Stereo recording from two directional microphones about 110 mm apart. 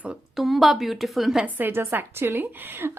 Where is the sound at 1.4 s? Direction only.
20° right (ahead or behind).